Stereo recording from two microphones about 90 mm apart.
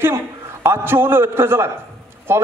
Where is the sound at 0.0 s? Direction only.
30° right (ahead or behind).